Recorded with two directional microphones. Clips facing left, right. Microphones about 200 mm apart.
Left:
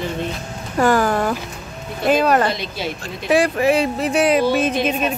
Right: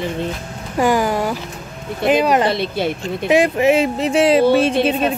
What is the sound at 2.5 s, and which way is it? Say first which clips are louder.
Speech: right 6 dB; 60° right (ahead or behind).